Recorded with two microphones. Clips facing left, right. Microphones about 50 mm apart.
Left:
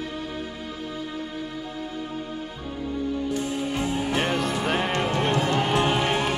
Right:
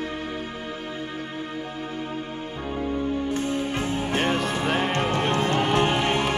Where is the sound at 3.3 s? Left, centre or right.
Right.